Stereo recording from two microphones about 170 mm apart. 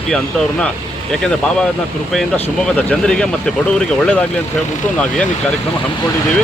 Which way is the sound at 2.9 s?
5° left (ahead or behind).